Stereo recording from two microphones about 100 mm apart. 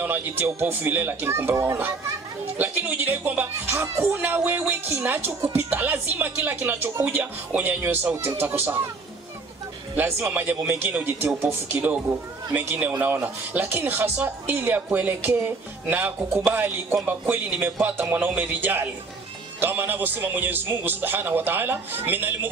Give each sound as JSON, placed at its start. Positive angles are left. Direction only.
{"t": 0.0, "sound": "a woman's voice", "side_deg": -20}
{"t": 3.7, "sound": "a woman's voice", "side_deg": -30}
{"t": 9.9, "sound": "a woman's voice", "side_deg": -20}